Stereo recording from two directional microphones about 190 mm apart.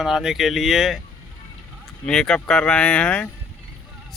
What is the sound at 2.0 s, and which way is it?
Speech, 5° left (ahead or behind).